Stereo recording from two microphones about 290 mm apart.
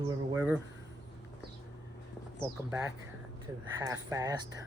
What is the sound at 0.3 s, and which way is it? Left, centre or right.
Speech, centre.